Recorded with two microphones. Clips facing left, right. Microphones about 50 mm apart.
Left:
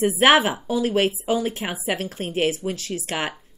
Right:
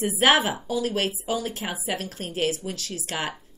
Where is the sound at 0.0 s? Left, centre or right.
Left.